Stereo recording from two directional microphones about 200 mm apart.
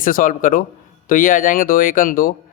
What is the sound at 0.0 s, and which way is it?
Speech, 45° left (ahead or behind).